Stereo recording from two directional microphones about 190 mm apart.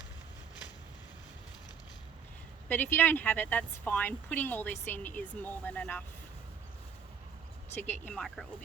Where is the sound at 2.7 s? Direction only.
10° left (ahead or behind).